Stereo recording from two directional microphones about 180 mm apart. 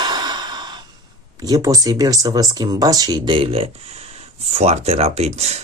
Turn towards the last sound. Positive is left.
turn(degrees=-35)  # may be behind; listen again after turning